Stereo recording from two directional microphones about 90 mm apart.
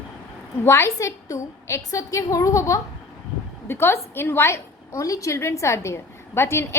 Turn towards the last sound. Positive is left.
turn(degrees=30)  # may be behind; listen again after turning